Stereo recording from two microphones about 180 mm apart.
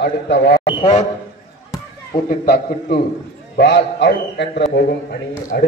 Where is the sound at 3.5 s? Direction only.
70° left (ahead or behind).